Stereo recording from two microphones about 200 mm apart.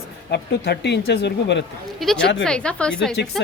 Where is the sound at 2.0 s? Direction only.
5° left (ahead or behind).